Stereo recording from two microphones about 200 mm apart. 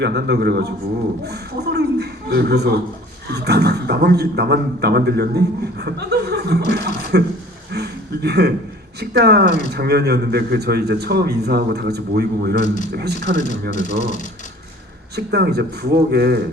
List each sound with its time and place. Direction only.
0.0 s a man's voice: 55° right (ahead or behind)
1.2 s a sound: 55° right (ahead or behind)
3.2 s a man's voice: 55° right (ahead or behind)
7.7 s a sound: 55° right (ahead or behind)
9.0 s a man's voice: 55° right (ahead or behind)
12.6 s speech: 40° left (ahead or behind)
13.0 s a man's voice: 55° right (ahead or behind)
13.5 s speech: 40° left (ahead or behind)
15.1 s a man's voice: 55° right (ahead or behind)